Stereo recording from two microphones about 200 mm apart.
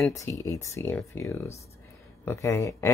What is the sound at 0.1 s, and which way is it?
Speech, 15° left (ahead or behind).